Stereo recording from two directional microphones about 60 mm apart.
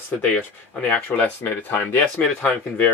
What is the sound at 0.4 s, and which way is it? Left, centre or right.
Speech, left.